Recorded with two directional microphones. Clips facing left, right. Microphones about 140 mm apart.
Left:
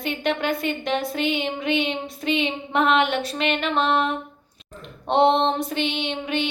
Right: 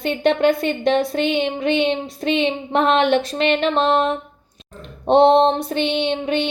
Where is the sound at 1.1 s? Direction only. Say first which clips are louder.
Right 5 dB; 35° right (ahead or behind).